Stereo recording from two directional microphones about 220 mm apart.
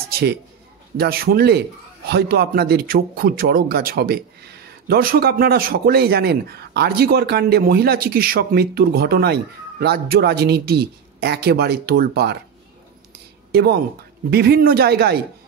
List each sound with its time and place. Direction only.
0.1 s a man's voice: 50° right (ahead or behind)
13.5 s a man's voice: 45° right (ahead or behind)